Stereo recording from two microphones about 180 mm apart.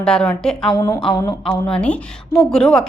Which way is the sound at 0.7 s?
20° left (ahead or behind).